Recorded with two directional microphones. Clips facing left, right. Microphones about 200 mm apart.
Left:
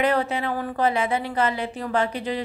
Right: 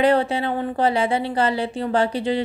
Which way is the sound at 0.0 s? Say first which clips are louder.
Right 4 dB; 30° right (ahead or behind).